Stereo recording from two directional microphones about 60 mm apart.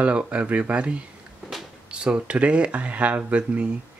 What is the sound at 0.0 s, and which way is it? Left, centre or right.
Speech, centre.